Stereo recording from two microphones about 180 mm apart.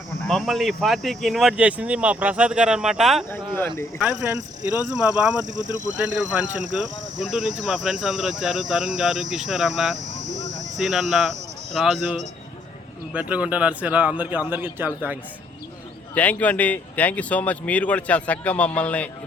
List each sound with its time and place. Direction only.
0.3 s speech: centre (ahead or behind)
3.2 s a sound: 10° left (ahead or behind)
3.9 s speech: 10° right (ahead or behind)
5.5 s speech: 45° right (ahead or behind)
6.0 s speech: 5° right (ahead or behind)
13.1 s speech: 10° right (ahead or behind)
16.1 s speech: 10° left (ahead or behind)